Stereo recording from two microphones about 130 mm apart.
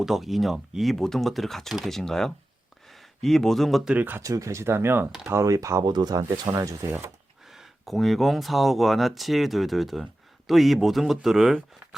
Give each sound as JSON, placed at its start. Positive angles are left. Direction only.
{"t": 0.0, "sound": "speech", "side_deg": 0}
{"t": 3.9, "sound": "speech", "side_deg": -15}
{"t": 4.2, "sound": "speech", "side_deg": -25}
{"t": 7.4, "sound": "speech", "side_deg": 0}